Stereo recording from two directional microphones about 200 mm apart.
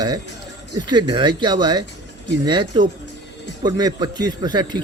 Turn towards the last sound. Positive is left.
turn(degrees=-20)  # may be behind; listen again after turning